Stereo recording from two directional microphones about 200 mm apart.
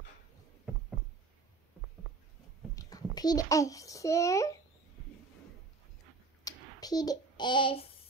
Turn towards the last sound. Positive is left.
turn(degrees=25)  # may be behind; listen again after turning